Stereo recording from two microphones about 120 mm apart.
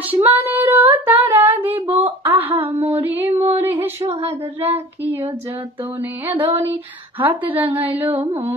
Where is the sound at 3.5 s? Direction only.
15° right (ahead or behind).